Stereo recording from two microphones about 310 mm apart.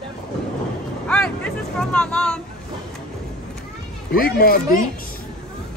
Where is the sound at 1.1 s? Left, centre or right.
Centre.